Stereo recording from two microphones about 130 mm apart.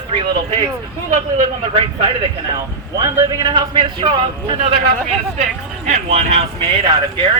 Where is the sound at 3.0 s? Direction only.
30° right (ahead or behind).